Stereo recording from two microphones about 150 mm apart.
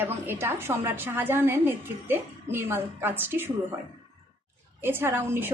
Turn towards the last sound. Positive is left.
turn(degrees=-15)  # may be behind; listen again after turning